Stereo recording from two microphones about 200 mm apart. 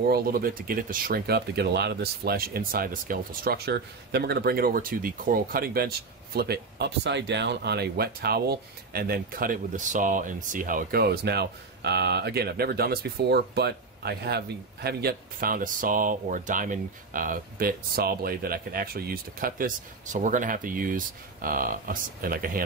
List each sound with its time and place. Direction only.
0.1 s speech: 50° right (ahead or behind)